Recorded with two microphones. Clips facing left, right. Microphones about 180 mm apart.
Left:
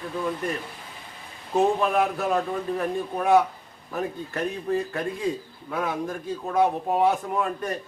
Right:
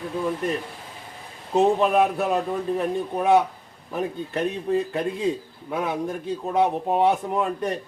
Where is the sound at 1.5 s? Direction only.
20° right (ahead or behind).